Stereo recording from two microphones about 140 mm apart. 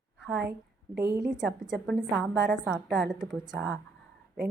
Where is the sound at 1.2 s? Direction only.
5° right (ahead or behind).